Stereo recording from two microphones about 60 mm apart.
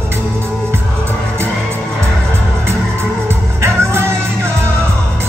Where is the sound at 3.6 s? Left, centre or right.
Right.